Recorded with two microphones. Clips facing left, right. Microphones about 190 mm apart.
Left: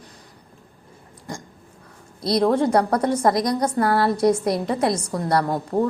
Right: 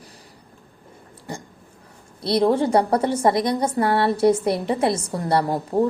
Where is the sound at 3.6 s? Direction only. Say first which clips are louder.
Even; centre (ahead or behind).